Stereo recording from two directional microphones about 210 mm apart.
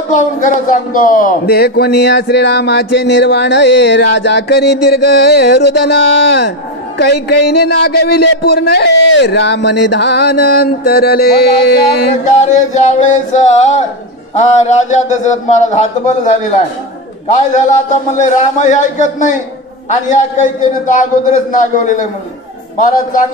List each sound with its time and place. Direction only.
0.1 s a man's voice: 35° left (ahead or behind)
7.0 s a man's voice: 50° left (ahead or behind)
12.4 s a man's voice: 35° left (ahead or behind)
23.1 s a man's voice: 40° left (ahead or behind)